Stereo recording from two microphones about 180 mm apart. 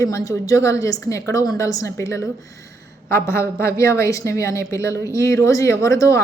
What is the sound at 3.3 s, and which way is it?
A woman's voice, 15° left (ahead or behind).